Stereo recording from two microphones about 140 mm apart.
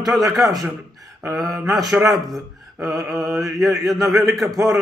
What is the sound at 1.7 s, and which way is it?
Speech, centre (ahead or behind).